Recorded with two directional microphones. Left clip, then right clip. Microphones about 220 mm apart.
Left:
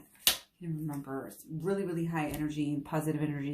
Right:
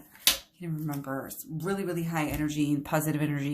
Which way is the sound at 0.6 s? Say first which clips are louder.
Right 4 dB; 30° right (ahead or behind).